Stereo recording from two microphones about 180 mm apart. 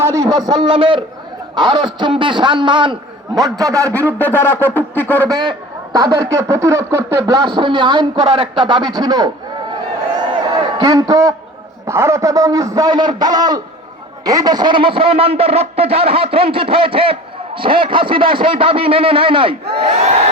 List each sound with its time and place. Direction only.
0.0 s a man's voice: 15° right (ahead or behind)
3.9 s speech: 10° left (ahead or behind)
5.3 s speech: 25° right (ahead or behind)
10.6 s a man's voice: 25° right (ahead or behind)
19.8 s a sound: 35° right (ahead or behind)